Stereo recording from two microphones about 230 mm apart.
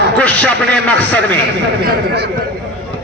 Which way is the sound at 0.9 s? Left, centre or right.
Centre.